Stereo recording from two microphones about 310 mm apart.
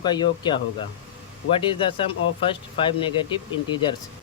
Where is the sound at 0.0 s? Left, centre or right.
Centre.